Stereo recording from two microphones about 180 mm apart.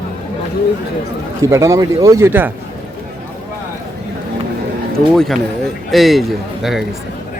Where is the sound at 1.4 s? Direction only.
15° right (ahead or behind).